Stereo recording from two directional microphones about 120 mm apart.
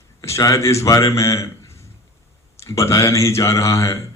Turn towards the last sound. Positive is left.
turn(degrees=25)  # may be behind; listen again after turning